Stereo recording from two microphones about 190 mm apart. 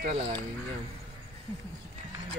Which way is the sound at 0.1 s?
30° right (ahead or behind).